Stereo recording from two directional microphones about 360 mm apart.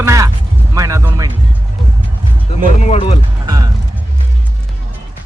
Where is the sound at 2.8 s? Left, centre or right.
Centre.